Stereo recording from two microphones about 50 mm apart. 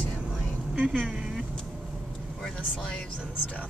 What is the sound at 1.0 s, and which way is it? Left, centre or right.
Vehicle, centre.